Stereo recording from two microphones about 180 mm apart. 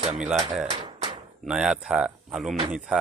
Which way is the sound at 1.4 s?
5° right (ahead or behind).